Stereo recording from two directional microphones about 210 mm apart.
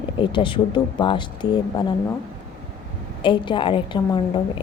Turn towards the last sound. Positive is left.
turn(degrees=20)  # may be behind; listen again after turning